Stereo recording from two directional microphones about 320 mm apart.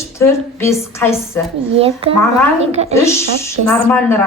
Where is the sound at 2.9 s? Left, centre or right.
Centre.